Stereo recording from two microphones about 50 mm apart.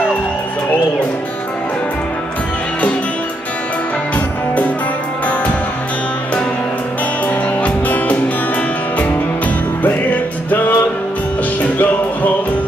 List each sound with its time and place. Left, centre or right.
7.6 s music: left
10.0 s music: left